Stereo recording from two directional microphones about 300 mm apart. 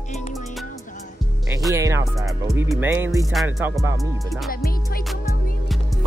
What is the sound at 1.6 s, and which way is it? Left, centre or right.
Speech, centre.